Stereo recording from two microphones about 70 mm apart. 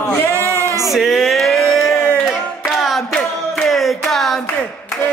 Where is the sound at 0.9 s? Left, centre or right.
Centre.